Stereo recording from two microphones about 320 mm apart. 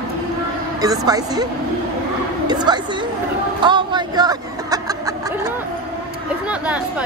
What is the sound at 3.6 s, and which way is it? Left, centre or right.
Snicker, centre.